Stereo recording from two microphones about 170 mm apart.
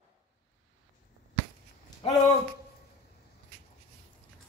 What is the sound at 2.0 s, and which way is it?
Speech, 30° left (ahead or behind).